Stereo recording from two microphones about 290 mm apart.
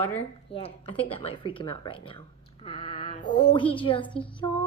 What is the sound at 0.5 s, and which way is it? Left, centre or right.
A woman's voice, centre.